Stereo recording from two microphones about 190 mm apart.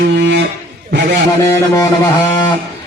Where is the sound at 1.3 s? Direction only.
15° left (ahead or behind).